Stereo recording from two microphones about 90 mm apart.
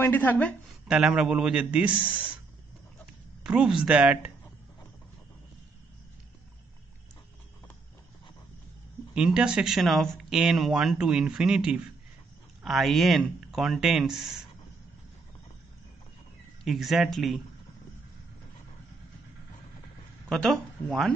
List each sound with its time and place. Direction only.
0.0 s a woman's voice: 20° left (ahead or behind)
0.8 s speech: 10° right (ahead or behind)
3.4 s speech: 10° right (ahead or behind)
9.1 s speech: 10° right (ahead or behind)
16.6 s speech: centre (ahead or behind)
20.2 s speech: 5° left (ahead or behind)